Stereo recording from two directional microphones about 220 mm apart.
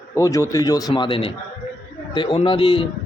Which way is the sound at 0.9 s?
20° left (ahead or behind).